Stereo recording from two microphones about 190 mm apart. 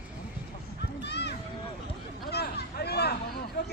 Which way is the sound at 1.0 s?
60° left (ahead or behind).